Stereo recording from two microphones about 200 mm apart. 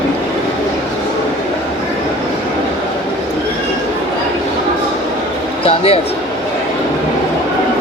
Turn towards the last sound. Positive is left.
turn(degrees=30)  # may be behind; listen again after turning